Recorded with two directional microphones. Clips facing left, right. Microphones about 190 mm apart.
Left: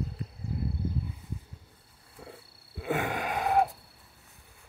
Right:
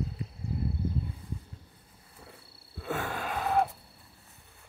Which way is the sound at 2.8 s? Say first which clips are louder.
Left 3 dB; 15° left (ahead or behind).